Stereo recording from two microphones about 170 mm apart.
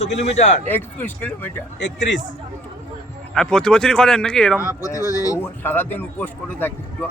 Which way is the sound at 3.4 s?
5° left (ahead or behind).